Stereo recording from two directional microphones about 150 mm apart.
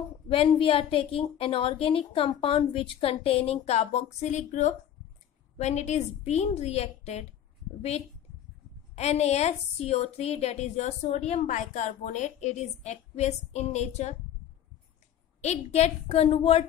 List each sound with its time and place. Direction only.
0.3 s a woman's voice: 35° left (ahead or behind)
8.9 s a woman's voice: 45° left (ahead or behind)
15.4 s a woman's voice: 45° left (ahead or behind)